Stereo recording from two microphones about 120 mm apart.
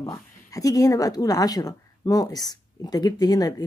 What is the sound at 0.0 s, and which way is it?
Speech, 30° left (ahead or behind).